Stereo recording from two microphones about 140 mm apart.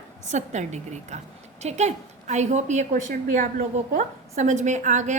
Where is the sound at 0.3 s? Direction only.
55° right (ahead or behind).